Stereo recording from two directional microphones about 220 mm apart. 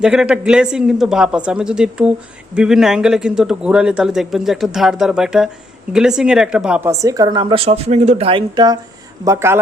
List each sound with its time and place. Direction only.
0.0 s a man's voice: 5° right (ahead or behind)